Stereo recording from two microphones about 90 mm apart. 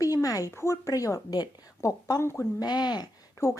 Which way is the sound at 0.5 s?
35° left (ahead or behind).